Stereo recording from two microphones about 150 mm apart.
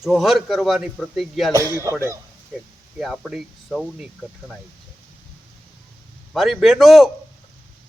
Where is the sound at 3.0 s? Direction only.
Centre (ahead or behind).